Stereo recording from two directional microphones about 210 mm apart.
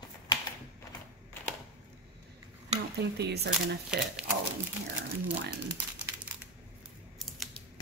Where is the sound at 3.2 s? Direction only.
50° right (ahead or behind).